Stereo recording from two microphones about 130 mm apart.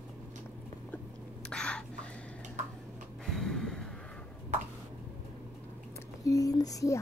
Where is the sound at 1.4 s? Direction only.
5° left (ahead or behind).